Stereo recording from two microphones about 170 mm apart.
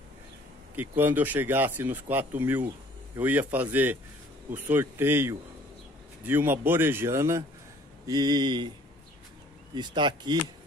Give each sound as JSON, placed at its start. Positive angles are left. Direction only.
{"t": 0.7, "sound": "speech", "side_deg": -10}
{"t": 9.8, "sound": "speech", "side_deg": -25}